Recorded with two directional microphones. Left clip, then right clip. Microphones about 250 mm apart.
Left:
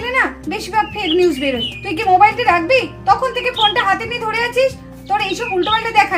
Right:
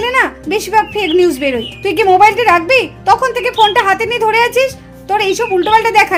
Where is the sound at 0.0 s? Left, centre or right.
Right.